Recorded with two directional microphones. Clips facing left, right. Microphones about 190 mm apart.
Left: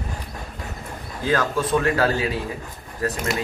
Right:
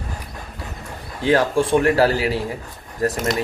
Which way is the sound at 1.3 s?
30° right (ahead or behind).